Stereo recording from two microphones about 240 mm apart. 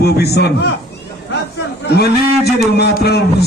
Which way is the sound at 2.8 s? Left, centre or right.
Left.